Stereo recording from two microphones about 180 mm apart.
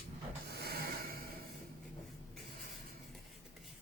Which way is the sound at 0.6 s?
60° right (ahead or behind).